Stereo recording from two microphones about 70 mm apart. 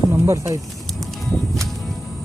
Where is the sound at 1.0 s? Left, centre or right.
Centre.